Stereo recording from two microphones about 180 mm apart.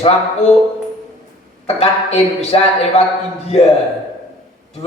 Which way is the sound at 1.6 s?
35° left (ahead or behind).